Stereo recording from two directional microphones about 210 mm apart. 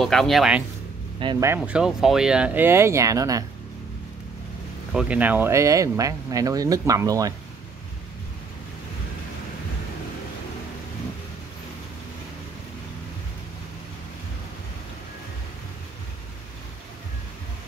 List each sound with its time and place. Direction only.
0.0 s speech: centre (ahead or behind)
1.2 s speech: 15° right (ahead or behind)
1.6 s speech: 5° right (ahead or behind)
4.9 s speech: 5° right (ahead or behind)